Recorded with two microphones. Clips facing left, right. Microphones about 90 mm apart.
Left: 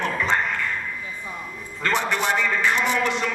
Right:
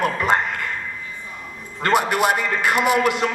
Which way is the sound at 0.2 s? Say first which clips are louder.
Right 3 dB; 60° right (ahead or behind).